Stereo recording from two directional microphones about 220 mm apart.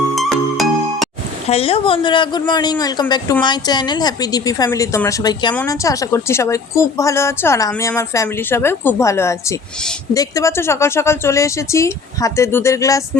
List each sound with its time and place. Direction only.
0.2 s music: centre (ahead or behind)
1.5 s a woman's voice: 25° left (ahead or behind)